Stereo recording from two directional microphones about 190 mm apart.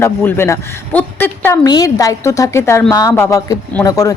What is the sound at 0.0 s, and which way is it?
A man's voice, 10° left (ahead or behind).